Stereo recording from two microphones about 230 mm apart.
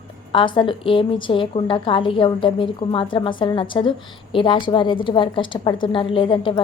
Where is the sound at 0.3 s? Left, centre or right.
Left.